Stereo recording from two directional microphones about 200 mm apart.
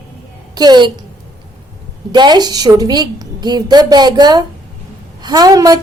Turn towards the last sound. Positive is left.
turn(degrees=-20)  # may be behind; listen again after turning